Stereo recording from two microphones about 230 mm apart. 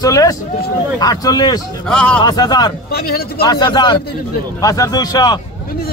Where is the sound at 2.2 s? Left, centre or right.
Centre.